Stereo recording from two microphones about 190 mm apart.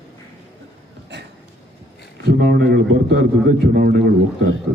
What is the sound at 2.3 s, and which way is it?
A man's voice, 50° right (ahead or behind).